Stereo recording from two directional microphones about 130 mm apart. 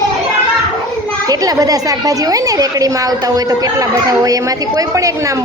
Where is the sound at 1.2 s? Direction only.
30° right (ahead or behind).